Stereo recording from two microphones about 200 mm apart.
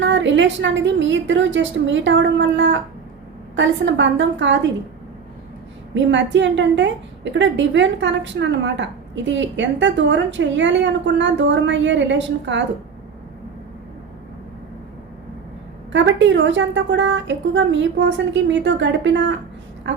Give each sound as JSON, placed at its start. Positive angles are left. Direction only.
{"t": 0.0, "sound": "a woman's voice", "side_deg": -65}
{"t": 5.9, "sound": "a woman's voice", "side_deg": -65}
{"t": 15.9, "sound": "a woman's voice", "side_deg": -65}